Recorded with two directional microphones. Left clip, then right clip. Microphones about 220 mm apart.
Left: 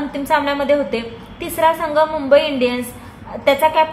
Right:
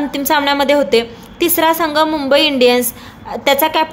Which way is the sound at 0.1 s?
50° right (ahead or behind).